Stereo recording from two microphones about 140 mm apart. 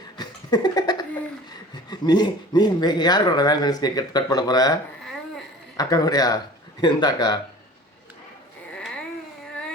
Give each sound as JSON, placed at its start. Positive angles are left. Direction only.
{"t": 0.2, "sound": "cough", "side_deg": 30}
{"t": 1.9, "sound": "speech", "side_deg": 30}